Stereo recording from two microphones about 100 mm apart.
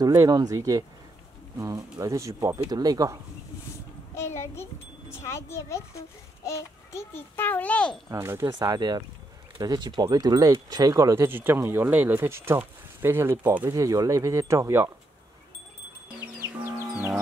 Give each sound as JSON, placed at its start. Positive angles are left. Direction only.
{"t": 0.0, "sound": "speech", "side_deg": -35}
{"t": 4.1, "sound": "a sound", "side_deg": 25}
{"t": 5.2, "sound": "a child's voice", "side_deg": 30}
{"t": 8.1, "sound": "speech", "side_deg": -25}
{"t": 13.7, "sound": "speech", "side_deg": -35}